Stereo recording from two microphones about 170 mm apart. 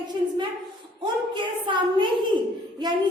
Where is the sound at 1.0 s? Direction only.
30° right (ahead or behind).